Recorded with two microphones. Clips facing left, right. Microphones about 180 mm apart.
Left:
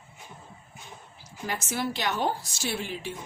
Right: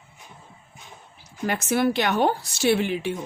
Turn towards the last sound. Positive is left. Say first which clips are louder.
# right 11 dB
turn(degrees=-70)  # may be behind; listen again after turning